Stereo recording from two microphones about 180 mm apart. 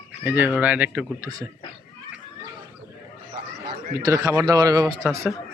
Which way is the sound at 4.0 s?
20° right (ahead or behind).